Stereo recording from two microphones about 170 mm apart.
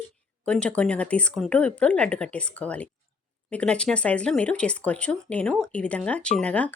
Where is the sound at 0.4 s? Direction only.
5° left (ahead or behind).